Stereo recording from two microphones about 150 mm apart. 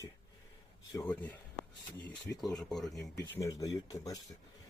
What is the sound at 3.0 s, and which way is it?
Speech, 15° left (ahead or behind).